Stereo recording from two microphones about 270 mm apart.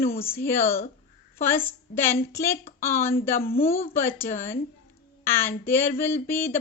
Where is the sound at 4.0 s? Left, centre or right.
Centre.